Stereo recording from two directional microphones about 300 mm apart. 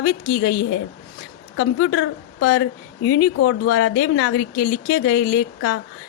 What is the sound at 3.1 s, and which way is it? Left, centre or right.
A woman's voice, left.